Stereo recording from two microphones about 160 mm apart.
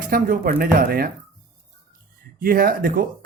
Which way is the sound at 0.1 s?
60° right (ahead or behind).